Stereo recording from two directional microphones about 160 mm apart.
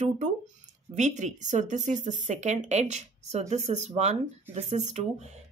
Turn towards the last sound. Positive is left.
turn(degrees=-45)  # may be behind; listen again after turning